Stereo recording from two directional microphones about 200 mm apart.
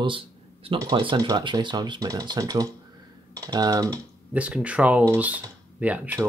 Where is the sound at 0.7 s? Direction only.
20° right (ahead or behind).